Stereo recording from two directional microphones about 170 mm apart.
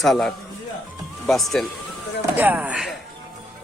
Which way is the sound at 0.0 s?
Centre (ahead or behind).